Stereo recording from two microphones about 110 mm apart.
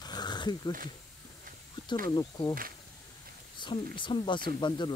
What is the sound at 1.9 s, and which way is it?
Speech, 45° left (ahead or behind).